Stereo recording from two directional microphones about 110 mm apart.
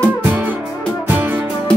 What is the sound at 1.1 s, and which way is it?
Music, 15° right (ahead or behind).